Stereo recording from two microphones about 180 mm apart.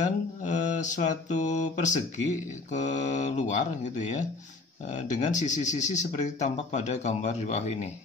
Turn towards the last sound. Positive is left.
turn(degrees=40)  # may be behind; listen again after turning